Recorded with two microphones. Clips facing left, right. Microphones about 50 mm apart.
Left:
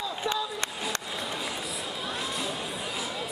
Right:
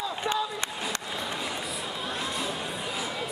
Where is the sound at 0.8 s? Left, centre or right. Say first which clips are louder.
Even; centre.